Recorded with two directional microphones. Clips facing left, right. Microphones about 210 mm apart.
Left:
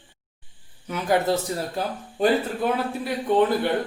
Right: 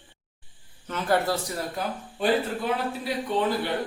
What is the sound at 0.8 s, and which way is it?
Speech, 15° left (ahead or behind).